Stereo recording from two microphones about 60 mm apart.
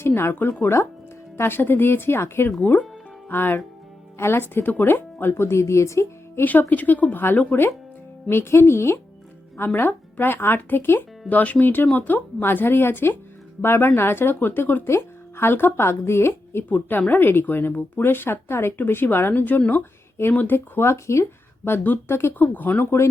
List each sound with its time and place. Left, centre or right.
0.0 s speech: left
2.6 s speech: left
6.6 s speech: left
9.7 s speech: left
11.3 s speech: left
16.6 s speech: left
22.5 s speech: left